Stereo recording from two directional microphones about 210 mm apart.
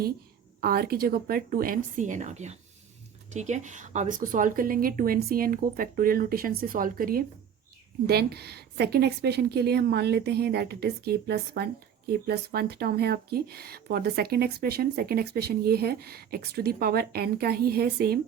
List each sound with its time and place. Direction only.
0.6 s a woman's voice: 45° right (ahead or behind)